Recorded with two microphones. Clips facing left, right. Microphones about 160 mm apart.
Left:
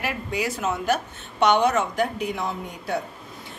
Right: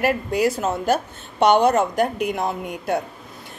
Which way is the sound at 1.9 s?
55° right (ahead or behind).